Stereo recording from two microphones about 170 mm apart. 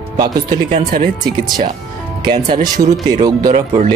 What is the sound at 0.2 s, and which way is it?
Speech, 25° right (ahead or behind).